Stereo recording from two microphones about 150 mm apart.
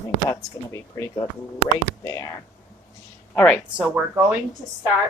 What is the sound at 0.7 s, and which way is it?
Speech, 20° left (ahead or behind).